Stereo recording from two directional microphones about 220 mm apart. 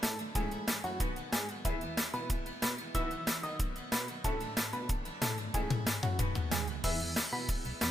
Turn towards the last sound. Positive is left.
turn(degrees=0)  # may be behind; listen again after turning